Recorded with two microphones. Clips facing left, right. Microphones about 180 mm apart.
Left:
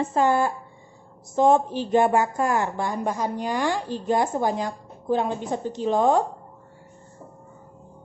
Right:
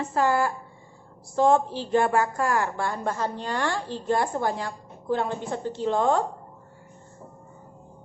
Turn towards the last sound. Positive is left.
turn(degrees=15)  # may be behind; listen again after turning